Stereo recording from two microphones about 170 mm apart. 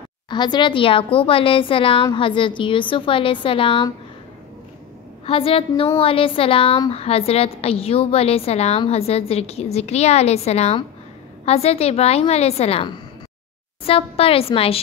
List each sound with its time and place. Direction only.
0.3 s a woman's voice: 25° left (ahead or behind)
5.2 s a woman's voice: 35° left (ahead or behind)